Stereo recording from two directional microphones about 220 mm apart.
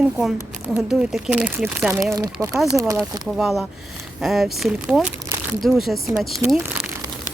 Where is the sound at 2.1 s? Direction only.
15° right (ahead or behind).